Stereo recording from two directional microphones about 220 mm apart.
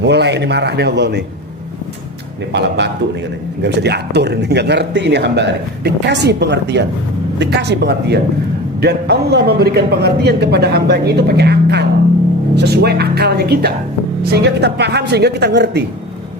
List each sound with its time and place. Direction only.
0.0 s speech: 50° right (ahead or behind)
2.5 s speech: 50° right (ahead or behind)